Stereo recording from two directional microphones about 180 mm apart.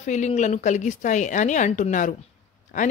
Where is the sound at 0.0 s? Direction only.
40° left (ahead or behind).